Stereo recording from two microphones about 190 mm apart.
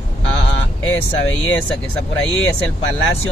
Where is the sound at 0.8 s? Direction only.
90° left.